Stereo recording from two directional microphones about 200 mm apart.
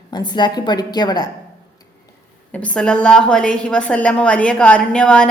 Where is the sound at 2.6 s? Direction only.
5° left (ahead or behind).